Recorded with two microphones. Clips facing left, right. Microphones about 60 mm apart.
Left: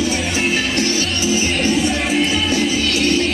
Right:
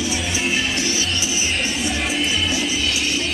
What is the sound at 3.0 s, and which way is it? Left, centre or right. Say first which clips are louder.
Music: left 7 dB; left.